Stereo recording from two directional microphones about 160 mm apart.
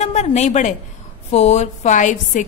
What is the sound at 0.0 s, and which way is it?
A woman's voice, 45° left (ahead or behind).